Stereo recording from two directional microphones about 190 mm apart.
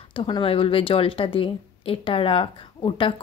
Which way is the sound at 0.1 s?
25° left (ahead or behind).